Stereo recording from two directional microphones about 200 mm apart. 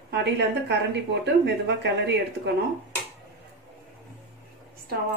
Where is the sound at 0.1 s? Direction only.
55° right (ahead or behind).